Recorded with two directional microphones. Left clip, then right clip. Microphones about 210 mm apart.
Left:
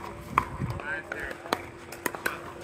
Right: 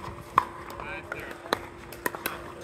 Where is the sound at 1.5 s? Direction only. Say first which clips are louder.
Right 1 dB; 20° left (ahead or behind).